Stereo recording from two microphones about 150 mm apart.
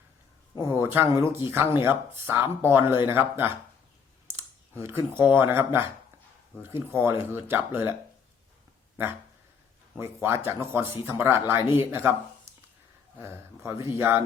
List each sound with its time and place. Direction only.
0.8 s speech: 15° right (ahead or behind)
4.8 s speech: 15° right (ahead or behind)
10.0 s speech: 15° right (ahead or behind)
13.1 s speech: 20° right (ahead or behind)